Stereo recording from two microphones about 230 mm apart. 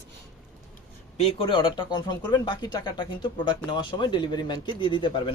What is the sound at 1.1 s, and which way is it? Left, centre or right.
A man's voice, left.